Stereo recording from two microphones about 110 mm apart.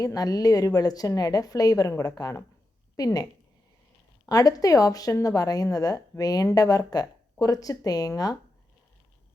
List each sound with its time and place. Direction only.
0.0 s a woman's voice: 35° left (ahead or behind)
4.3 s a woman's voice: 35° left (ahead or behind)